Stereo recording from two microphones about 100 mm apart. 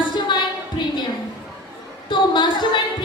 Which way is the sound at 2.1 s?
50° left (ahead or behind).